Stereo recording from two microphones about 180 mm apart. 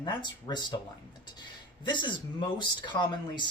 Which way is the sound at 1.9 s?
25° left (ahead or behind).